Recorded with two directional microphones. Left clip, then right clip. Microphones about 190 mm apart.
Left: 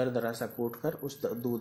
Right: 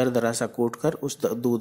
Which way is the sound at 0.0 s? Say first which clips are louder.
Right 8 dB; 30° right (ahead or behind).